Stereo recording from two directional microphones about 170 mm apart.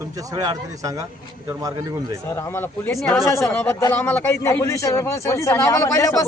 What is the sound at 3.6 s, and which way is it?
A man's voice, 10° left (ahead or behind).